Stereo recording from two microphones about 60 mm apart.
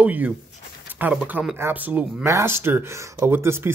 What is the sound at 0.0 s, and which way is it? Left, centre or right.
Speech, right.